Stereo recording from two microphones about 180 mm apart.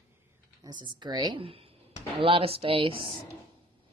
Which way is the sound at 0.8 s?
25° right (ahead or behind).